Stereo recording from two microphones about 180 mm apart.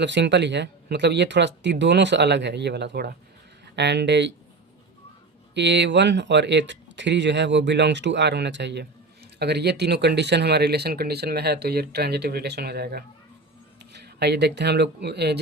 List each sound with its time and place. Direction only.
0.0 s speech: 75° right (ahead or behind)
3.8 s speech: 70° right (ahead or behind)
5.5 s speech: 75° right (ahead or behind)